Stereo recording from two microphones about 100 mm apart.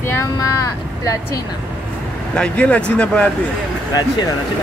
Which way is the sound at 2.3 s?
10° left (ahead or behind).